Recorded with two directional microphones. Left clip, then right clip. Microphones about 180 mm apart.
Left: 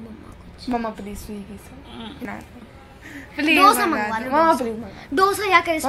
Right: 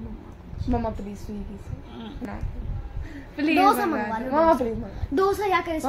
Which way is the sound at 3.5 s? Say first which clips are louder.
Left 5 dB; 30° right (ahead or behind).